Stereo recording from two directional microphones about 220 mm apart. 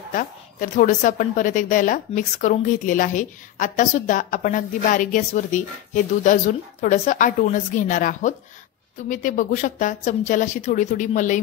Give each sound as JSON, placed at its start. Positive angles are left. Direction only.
{"t": 0.1, "sound": "a woman's voice", "side_deg": 35}